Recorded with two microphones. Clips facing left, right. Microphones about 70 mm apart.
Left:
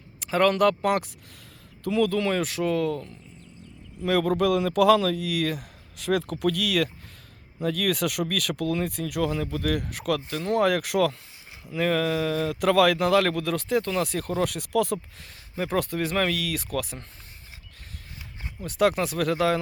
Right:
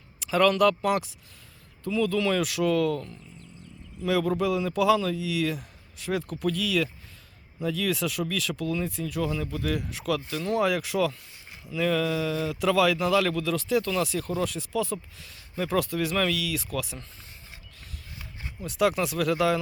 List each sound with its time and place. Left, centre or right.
0.2 s a man's voice: left
1.8 s speech: left
4.0 s speech: left
6.0 s a man's voice: left
11.7 s a man's voice: left
15.2 s a man's voice: left
18.6 s a man's voice: left